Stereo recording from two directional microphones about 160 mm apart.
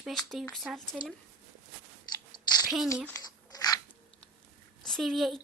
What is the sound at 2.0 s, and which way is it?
Chewing, 25° left (ahead or behind).